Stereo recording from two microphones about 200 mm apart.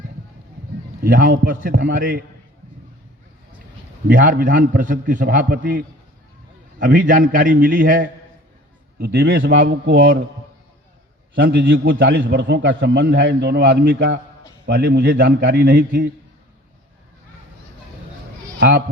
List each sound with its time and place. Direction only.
1.0 s a man's voice: 45° right (ahead or behind)
4.1 s a man's voice: 45° right (ahead or behind)
9.0 s a man's voice: 55° right (ahead or behind)
11.3 s a man's voice: 60° right (ahead or behind)